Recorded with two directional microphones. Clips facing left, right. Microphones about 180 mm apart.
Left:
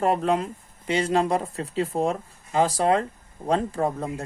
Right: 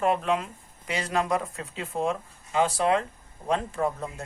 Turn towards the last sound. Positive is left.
turn(degrees=40)  # may be behind; listen again after turning